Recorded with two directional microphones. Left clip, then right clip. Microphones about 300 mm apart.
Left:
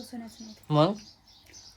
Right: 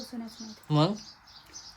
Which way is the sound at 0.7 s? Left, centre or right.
Centre.